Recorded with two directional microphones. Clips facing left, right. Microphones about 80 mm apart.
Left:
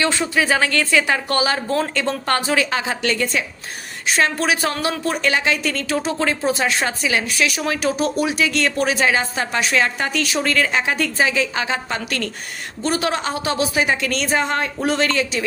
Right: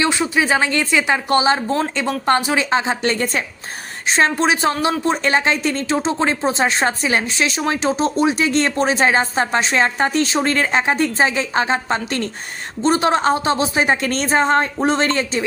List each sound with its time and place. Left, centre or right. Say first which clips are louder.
0.0 s a woman's voice: right 1 dB; centre